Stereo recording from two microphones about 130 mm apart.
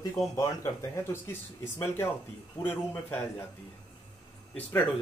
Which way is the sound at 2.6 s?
15° left (ahead or behind).